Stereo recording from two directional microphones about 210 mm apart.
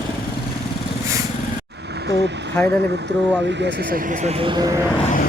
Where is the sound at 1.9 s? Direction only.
55° right (ahead or behind); by 4.9 s 15° right (ahead or behind).